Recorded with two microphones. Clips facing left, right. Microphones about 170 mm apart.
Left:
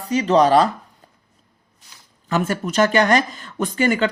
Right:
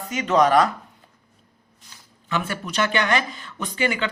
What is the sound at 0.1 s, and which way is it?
Speech, 35° left (ahead or behind).